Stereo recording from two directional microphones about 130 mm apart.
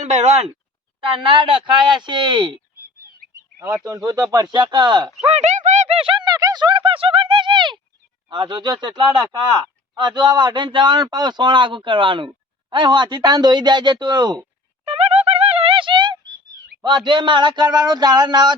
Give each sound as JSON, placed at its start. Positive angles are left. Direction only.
{"t": 0.0, "sound": "speech", "side_deg": -60}
{"t": 1.2, "sound": "speech", "side_deg": -40}
{"t": 3.3, "sound": "bird", "side_deg": -25}
{"t": 3.8, "sound": "speech", "side_deg": -25}
{"t": 5.2, "sound": "speech", "side_deg": -55}
{"t": 14.8, "sound": "music", "side_deg": -50}
{"t": 16.8, "sound": "speech", "side_deg": -35}